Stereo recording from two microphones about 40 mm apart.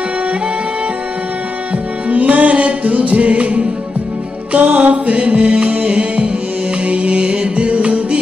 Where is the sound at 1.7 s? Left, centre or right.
Right.